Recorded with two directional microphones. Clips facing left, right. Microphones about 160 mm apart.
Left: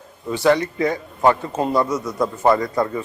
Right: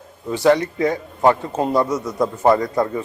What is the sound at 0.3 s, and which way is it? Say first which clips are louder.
A man's voice: right 1 dB; 20° right (ahead or behind).